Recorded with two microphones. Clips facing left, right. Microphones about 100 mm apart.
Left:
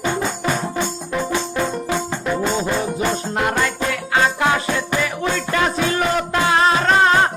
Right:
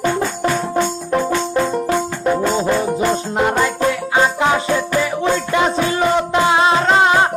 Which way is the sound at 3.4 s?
15° right (ahead or behind).